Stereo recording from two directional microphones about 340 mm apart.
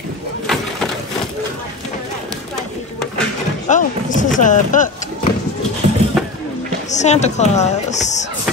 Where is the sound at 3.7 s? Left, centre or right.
Left.